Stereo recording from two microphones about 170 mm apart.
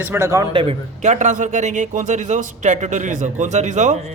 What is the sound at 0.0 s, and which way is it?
Speech, 15° right (ahead or behind).